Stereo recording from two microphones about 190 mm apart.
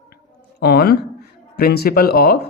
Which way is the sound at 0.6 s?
55° left (ahead or behind).